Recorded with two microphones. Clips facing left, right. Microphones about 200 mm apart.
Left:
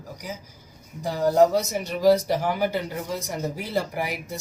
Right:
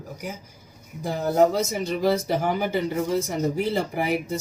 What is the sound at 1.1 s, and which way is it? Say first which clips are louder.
Speech: left 2 dB; 50° right (ahead or behind).